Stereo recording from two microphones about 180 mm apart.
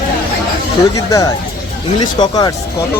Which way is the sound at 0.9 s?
20° left (ahead or behind).